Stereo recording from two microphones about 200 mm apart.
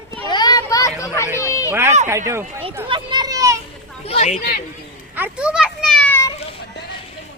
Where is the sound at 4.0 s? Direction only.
30° left (ahead or behind).